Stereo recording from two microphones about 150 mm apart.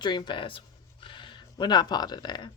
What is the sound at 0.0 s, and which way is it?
Speech, 30° left (ahead or behind).